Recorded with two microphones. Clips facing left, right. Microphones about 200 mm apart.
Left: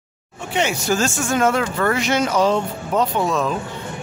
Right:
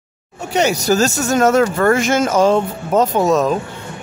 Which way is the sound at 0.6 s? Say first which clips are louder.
Right 5 dB; 40° right (ahead or behind).